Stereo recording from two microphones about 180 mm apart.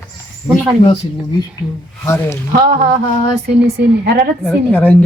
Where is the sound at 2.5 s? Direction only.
55° right (ahead or behind).